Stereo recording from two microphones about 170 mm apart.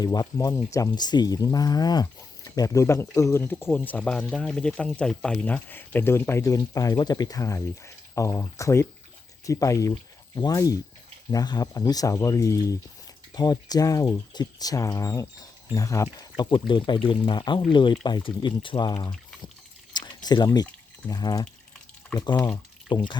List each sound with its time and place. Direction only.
0.0 s speech: 20° left (ahead or behind)
19.9 s drip: 25° left (ahead or behind)
21.1 s speech: 25° left (ahead or behind)